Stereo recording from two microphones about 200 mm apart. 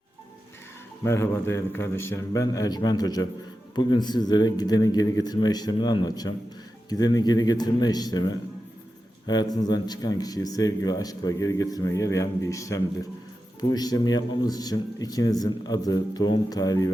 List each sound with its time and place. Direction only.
1.0 s speech: 15° left (ahead or behind)